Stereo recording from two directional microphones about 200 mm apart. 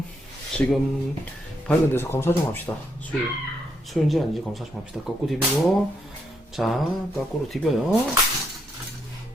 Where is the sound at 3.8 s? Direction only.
Centre (ahead or behind).